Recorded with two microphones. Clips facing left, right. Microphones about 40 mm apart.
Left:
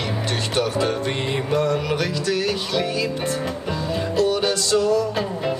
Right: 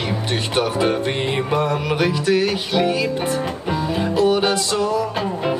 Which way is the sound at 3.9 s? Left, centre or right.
Right.